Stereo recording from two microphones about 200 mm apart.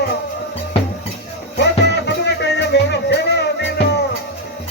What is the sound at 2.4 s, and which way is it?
Music, 55° left (ahead or behind).